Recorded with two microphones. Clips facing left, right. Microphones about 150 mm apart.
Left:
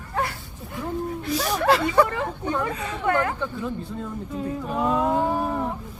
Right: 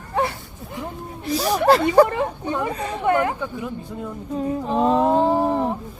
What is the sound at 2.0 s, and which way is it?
Speech, 20° right (ahead or behind).